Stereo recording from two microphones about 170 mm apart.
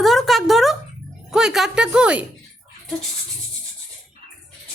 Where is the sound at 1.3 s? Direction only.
5° right (ahead or behind).